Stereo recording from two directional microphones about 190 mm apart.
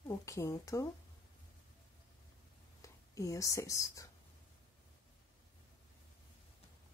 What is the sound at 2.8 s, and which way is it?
Speech, 15° left (ahead or behind).